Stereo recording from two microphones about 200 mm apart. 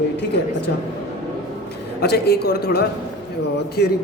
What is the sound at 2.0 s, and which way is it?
Speech, 55° left (ahead or behind).